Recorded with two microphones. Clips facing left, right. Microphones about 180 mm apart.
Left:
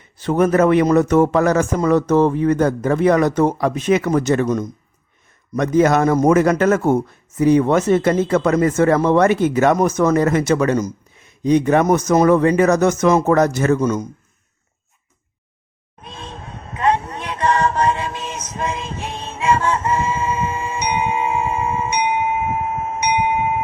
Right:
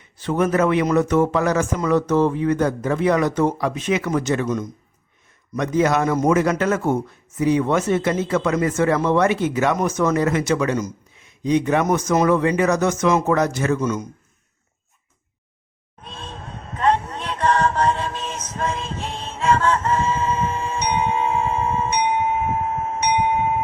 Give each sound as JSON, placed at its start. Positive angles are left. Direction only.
{"t": 0.2, "sound": "a man's voice", "side_deg": 45}
{"t": 16.0, "sound": "a sound", "side_deg": 15}
{"t": 16.7, "sound": "music", "side_deg": 10}
{"t": 23.0, "sound": "wind chime", "side_deg": 10}